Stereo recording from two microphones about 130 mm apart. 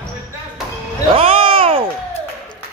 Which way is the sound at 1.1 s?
45° right (ahead or behind).